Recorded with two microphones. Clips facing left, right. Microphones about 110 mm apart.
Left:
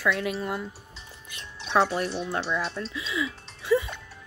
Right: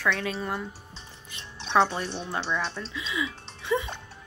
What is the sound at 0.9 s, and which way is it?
Music, 30° right (ahead or behind).